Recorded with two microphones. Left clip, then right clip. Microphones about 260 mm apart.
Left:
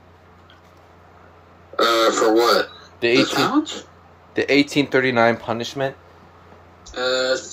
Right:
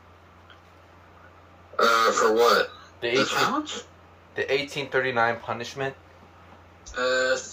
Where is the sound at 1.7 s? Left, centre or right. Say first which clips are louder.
Left 3 dB; left.